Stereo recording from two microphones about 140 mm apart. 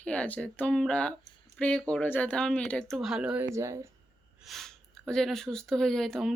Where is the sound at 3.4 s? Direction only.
20° right (ahead or behind).